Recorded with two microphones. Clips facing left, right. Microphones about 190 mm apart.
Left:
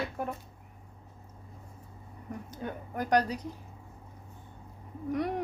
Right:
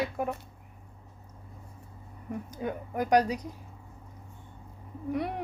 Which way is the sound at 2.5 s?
10° right (ahead or behind).